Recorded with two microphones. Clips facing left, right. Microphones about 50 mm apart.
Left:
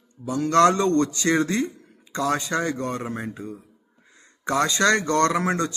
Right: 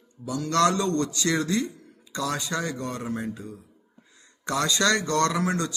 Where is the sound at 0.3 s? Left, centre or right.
Left.